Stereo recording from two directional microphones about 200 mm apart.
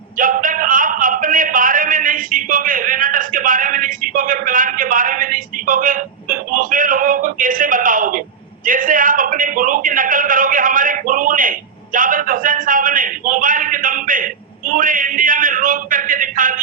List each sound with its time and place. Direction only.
0.2 s a man's voice: 45° right (ahead or behind)